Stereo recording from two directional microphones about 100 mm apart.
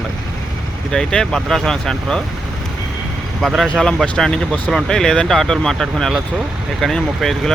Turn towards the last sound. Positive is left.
turn(degrees=5)  # may be behind; listen again after turning